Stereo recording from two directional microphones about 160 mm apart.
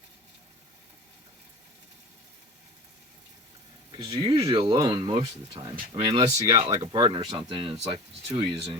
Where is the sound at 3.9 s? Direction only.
30° right (ahead or behind).